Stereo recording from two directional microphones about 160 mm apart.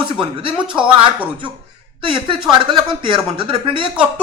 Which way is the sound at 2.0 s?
30° right (ahead or behind).